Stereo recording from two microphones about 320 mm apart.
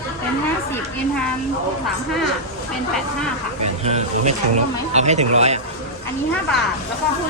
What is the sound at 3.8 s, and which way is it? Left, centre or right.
Speech, centre.